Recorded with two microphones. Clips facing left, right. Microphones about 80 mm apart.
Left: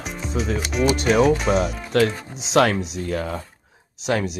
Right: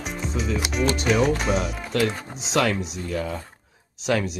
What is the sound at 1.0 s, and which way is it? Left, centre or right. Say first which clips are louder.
Speech: left 4 dB; centre.